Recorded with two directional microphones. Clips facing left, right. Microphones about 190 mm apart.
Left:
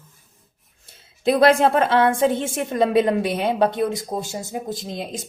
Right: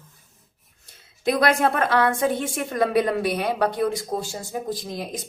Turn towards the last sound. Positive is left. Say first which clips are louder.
# left 1 dB
turn(degrees=25)  # may be behind; listen again after turning